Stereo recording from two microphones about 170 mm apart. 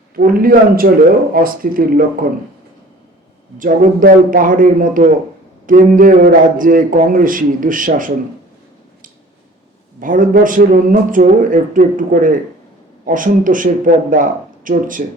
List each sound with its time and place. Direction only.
0.2 s speech: 60° right (ahead or behind)
3.6 s a man's voice: 55° right (ahead or behind)
10.0 s a man's voice: 50° right (ahead or behind)